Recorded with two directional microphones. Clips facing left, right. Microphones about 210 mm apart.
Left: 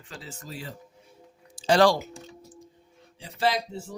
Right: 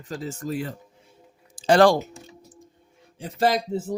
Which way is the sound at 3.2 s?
45° right (ahead or behind).